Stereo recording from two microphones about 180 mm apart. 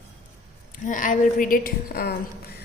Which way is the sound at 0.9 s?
45° left (ahead or behind).